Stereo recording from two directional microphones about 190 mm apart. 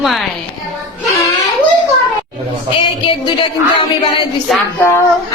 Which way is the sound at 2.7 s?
25° left (ahead or behind).